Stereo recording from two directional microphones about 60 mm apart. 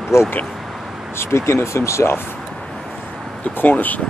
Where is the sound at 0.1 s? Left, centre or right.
Left.